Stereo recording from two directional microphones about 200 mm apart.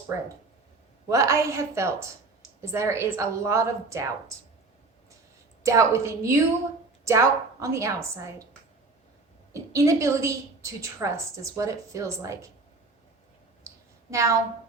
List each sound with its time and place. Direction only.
1.0 s a woman's voice: 15° right (ahead or behind)
5.6 s a woman's voice: 15° right (ahead or behind)
9.5 s a woman's voice: 15° right (ahead or behind)
13.7 s clicking: 15° right (ahead or behind)